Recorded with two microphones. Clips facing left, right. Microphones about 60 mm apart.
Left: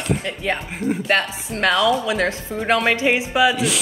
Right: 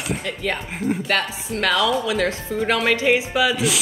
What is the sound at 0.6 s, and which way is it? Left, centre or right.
Speech, centre.